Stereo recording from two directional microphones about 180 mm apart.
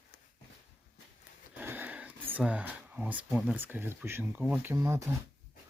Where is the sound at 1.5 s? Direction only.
10° right (ahead or behind).